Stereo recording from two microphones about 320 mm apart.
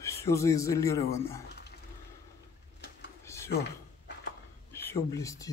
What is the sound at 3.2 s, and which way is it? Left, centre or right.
Typing, centre.